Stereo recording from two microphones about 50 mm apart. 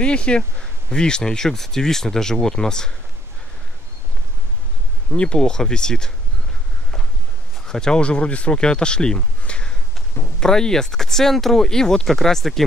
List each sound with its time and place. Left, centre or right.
0.0 s speech: left
5.1 s speech: left
7.6 s speech: centre